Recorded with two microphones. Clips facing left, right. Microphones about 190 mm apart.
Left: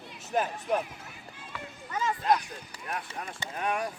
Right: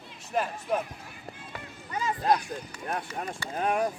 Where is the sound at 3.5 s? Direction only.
25° right (ahead or behind).